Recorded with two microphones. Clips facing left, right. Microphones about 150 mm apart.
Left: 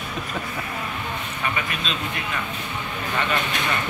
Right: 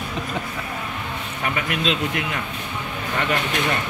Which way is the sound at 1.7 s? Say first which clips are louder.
Right 6 dB; 90° right.